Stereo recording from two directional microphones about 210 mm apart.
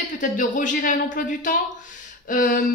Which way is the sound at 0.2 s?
35° left (ahead or behind).